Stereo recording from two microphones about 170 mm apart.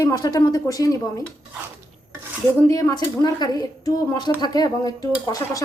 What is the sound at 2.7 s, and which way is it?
Speech, 20° left (ahead or behind).